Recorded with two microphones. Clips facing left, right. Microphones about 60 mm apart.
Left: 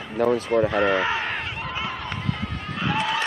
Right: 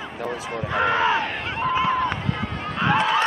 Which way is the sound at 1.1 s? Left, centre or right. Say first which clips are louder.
Right 3 dB; right.